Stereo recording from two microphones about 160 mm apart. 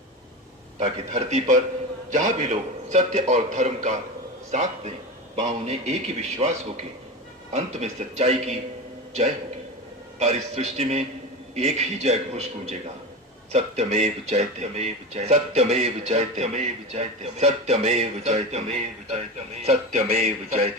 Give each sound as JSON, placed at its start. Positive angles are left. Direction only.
{"t": 0.8, "sound": "speech", "side_deg": -45}
{"t": 10.2, "sound": "speech", "side_deg": -45}